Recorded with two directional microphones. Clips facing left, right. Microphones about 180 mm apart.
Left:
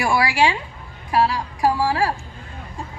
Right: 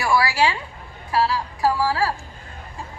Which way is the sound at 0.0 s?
25° left (ahead or behind).